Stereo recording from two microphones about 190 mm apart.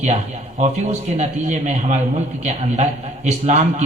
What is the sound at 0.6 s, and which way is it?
A man's voice, 35° right (ahead or behind).